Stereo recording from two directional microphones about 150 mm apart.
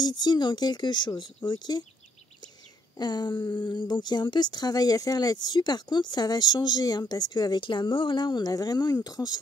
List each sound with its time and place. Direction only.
0.0 s speech: 30° left (ahead or behind)
3.0 s speech: 30° left (ahead or behind)
3.3 s a sound: 15° left (ahead or behind)
3.6 s speech: 30° left (ahead or behind)